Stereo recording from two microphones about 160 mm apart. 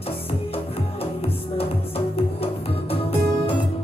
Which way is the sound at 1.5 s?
35° left (ahead or behind).